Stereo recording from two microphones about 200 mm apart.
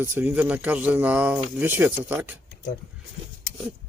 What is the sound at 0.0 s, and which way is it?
Speech, 10° right (ahead or behind).